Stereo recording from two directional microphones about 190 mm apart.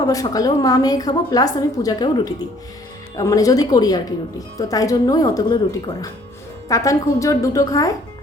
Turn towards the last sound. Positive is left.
turn(degrees=20)  # may be behind; listen again after turning